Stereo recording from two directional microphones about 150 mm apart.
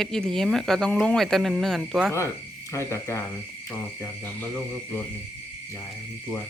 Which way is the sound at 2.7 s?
20° left (ahead or behind).